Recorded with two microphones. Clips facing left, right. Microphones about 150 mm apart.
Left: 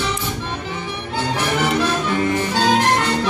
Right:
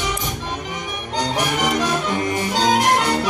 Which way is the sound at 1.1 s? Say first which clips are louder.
Even; 15° right (ahead or behind).